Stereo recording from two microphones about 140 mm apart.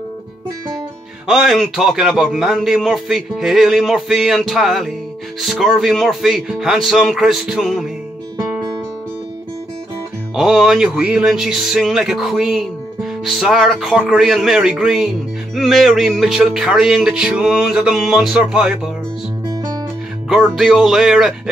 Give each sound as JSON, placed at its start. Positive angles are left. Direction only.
{"t": 1.2, "sound": "speech", "side_deg": -5}
{"t": 10.3, "sound": "speech", "side_deg": 0}
{"t": 19.4, "sound": "guitar", "side_deg": -25}
{"t": 20.2, "sound": "speech", "side_deg": -5}